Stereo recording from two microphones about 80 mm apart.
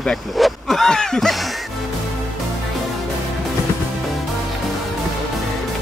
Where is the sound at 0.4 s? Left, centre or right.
Centre.